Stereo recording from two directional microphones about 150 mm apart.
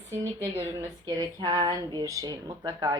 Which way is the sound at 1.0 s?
30° right (ahead or behind).